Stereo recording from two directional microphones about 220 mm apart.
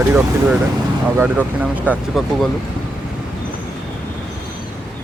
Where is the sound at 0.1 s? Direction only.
5° right (ahead or behind).